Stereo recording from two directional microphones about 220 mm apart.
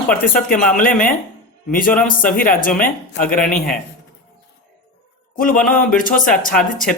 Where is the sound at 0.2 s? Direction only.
40° left (ahead or behind).